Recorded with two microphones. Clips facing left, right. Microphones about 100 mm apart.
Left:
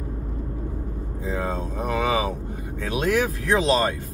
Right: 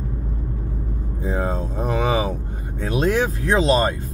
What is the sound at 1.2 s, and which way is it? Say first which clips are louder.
Speech: right 3 dB; 30° right (ahead or behind).